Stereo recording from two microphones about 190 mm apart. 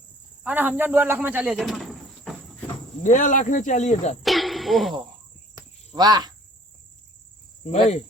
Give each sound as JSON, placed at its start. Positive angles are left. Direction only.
{"t": 0.4, "sound": "snake", "side_deg": -10}
{"t": 3.0, "sound": "speech", "side_deg": 40}
{"t": 4.2, "sound": "a sound", "side_deg": 0}
{"t": 5.5, "sound": "cricket", "side_deg": -20}
{"t": 7.6, "sound": "speech", "side_deg": 35}